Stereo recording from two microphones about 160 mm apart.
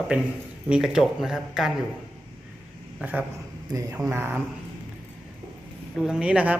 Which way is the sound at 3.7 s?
20° right (ahead or behind).